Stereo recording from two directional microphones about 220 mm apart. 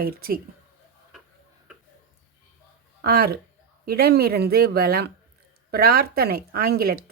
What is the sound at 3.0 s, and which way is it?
Speech, 45° right (ahead or behind).